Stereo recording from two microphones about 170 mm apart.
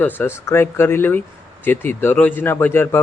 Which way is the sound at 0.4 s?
15° left (ahead or behind).